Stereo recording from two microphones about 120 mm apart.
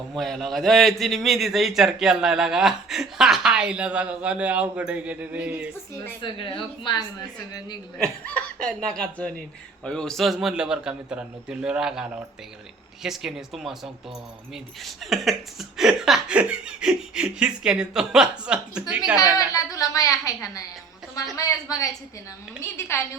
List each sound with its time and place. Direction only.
0.1 s a man's voice: centre (ahead or behind)
6.2 s a woman's voice: 45° left (ahead or behind)
7.9 s a man's voice: 10° left (ahead or behind); by 19.1 s 5° right (ahead or behind)
19.1 s a woman's voice: 30° left (ahead or behind)